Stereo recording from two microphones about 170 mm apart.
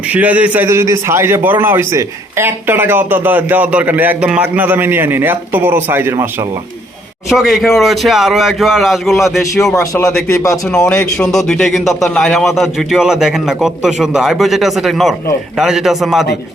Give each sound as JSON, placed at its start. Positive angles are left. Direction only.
{"t": 0.1, "sound": "a man's voice", "side_deg": -10}
{"t": 7.3, "sound": "a man's voice", "side_deg": 0}
{"t": 9.7, "sound": "speech", "side_deg": 20}
{"t": 10.7, "sound": "a man's voice", "side_deg": 5}